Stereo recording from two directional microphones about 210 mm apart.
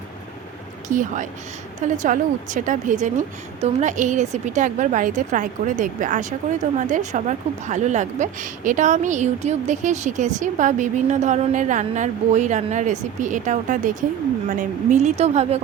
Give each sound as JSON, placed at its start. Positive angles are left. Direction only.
{"t": 0.9, "sound": "a woman's voice", "side_deg": -35}